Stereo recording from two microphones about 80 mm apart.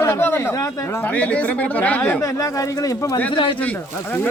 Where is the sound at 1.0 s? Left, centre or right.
Centre.